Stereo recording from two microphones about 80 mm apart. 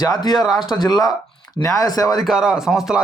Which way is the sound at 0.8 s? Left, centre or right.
Left.